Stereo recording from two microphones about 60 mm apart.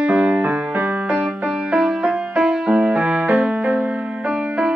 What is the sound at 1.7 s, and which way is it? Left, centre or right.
Music, centre.